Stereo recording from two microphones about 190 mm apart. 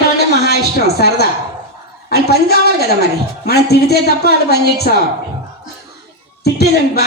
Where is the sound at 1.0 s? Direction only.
55° left (ahead or behind).